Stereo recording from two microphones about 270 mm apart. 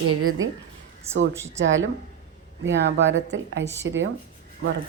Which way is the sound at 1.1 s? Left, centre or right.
Centre.